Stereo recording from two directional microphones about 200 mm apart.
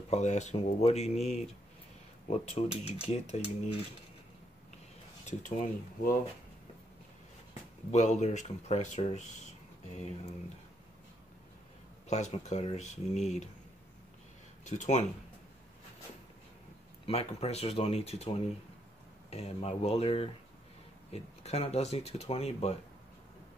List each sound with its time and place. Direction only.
0.1 s speech: 35° left (ahead or behind)
5.2 s speech: 40° left (ahead or behind)
7.9 s speech: 35° left (ahead or behind)
12.1 s speech: 35° left (ahead or behind)
14.6 s speech: 35° left (ahead or behind)
17.0 s speech: 30° left (ahead or behind)